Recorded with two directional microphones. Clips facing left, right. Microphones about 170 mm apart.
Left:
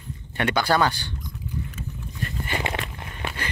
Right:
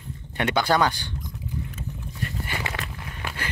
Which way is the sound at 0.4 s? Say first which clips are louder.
Even; 20° right (ahead or behind).